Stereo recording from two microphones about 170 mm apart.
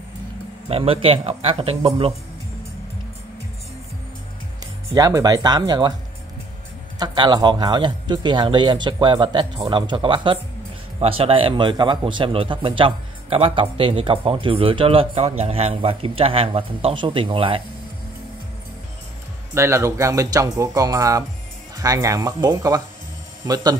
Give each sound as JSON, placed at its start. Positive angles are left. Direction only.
{"t": 0.7, "sound": "speech", "side_deg": -35}
{"t": 4.9, "sound": "speech", "side_deg": -20}
{"t": 7.0, "sound": "speech", "side_deg": -25}
{"t": 19.5, "sound": "speech", "side_deg": -15}